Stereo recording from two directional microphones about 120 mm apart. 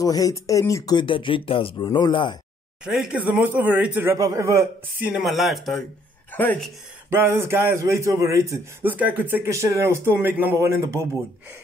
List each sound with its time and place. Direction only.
0.0 s speech: 30° left (ahead or behind)
0.9 s speech: 45° left (ahead or behind)
1.9 s speech: 35° left (ahead or behind)
2.8 s speech: 5° right (ahead or behind); by 4.6 s 25° right (ahead or behind)
5.0 s speech: 5° right (ahead or behind)
6.3 s a woman's voice: 15° left (ahead or behind)
7.1 s speech: 20° right (ahead or behind)
8.9 s speech: 15° right (ahead or behind)